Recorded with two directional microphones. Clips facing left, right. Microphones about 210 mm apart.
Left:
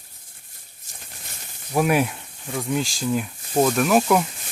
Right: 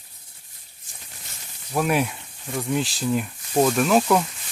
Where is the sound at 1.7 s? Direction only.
5° left (ahead or behind).